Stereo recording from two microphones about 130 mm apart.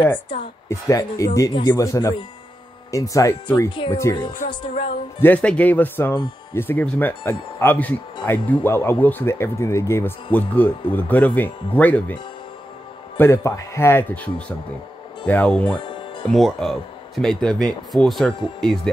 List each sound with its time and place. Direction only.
0.7 s speech: 25° left (ahead or behind)
4.6 s speech: 45° left (ahead or behind)
5.2 s speech: 10° left (ahead or behind)
13.2 s speech: 20° left (ahead or behind)
15.8 s music: 40° left (ahead or behind)
16.3 s speech: 5° left (ahead or behind)